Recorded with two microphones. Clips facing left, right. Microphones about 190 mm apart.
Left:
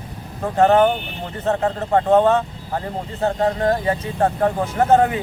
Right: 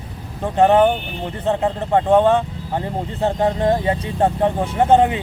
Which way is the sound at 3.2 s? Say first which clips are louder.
Right 1 dB; 25° right (ahead or behind).